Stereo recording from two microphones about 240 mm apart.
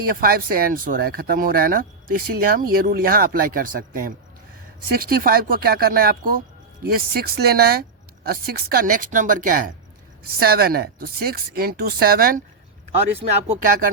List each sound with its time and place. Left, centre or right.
0.0 s speech: right